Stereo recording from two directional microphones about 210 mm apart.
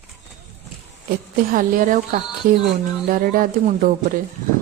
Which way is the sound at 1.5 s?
40° right (ahead or behind).